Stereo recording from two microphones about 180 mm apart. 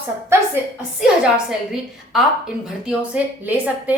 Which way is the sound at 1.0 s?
5° right (ahead or behind).